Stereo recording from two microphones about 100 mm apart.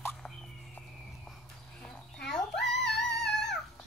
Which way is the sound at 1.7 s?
10° left (ahead or behind).